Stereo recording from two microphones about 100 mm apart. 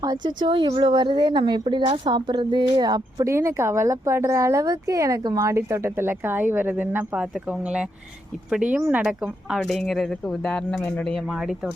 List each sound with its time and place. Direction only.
0.0 s a woman's voice: 45° right (ahead or behind)
3.2 s speech: 25° right (ahead or behind)
9.5 s speech: centre (ahead or behind)